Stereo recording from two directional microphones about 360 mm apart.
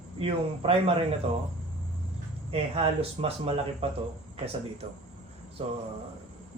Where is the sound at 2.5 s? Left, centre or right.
Centre.